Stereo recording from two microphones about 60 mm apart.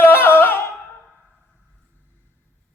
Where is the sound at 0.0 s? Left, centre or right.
Left.